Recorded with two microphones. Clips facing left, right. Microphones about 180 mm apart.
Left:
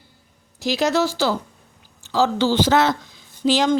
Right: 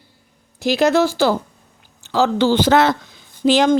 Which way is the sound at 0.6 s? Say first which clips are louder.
Right 4 dB; 55° right (ahead or behind).